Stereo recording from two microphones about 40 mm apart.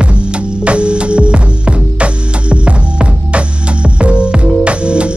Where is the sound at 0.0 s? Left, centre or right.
Right.